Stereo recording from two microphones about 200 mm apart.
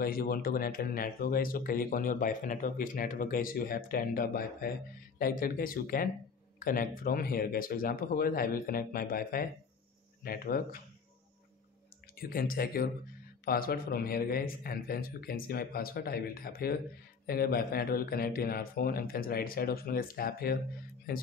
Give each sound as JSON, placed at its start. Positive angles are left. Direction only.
{"t": 0.0, "sound": "speech", "side_deg": 45}
{"t": 12.2, "sound": "speech", "side_deg": 45}